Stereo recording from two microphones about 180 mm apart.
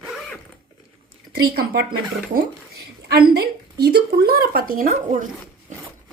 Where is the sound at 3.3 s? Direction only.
60° right (ahead or behind).